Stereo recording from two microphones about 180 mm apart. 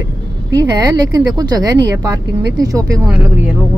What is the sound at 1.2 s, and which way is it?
Speech, 20° right (ahead or behind).